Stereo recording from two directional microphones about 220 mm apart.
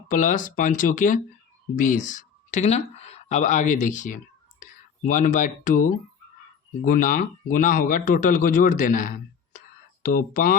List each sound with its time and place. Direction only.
0.1 s speech: 35° left (ahead or behind)